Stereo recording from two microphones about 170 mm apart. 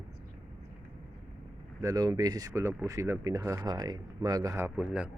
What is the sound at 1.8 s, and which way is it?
Speech, 20° right (ahead or behind).